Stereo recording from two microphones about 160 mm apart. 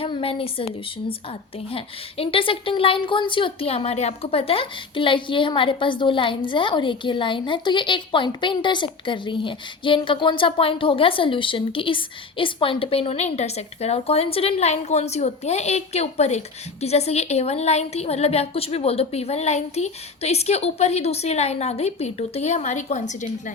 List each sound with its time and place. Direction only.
0.0 s speech: 35° left (ahead or behind)
1.7 s a woman's voice: 35° left (ahead or behind)